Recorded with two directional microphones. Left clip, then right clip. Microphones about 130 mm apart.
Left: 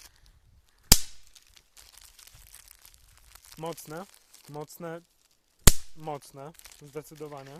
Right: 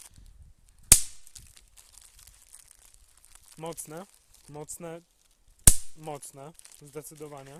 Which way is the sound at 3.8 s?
20° left (ahead or behind).